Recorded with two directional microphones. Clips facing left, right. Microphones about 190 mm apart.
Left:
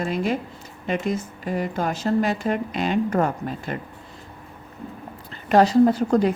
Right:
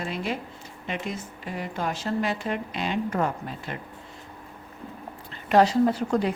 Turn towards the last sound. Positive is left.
turn(degrees=45)  # may be behind; listen again after turning